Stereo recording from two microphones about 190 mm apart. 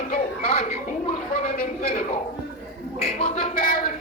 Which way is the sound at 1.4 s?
40° left (ahead or behind).